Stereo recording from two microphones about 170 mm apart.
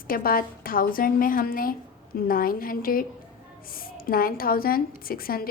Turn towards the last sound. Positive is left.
turn(degrees=60)  # may be behind; listen again after turning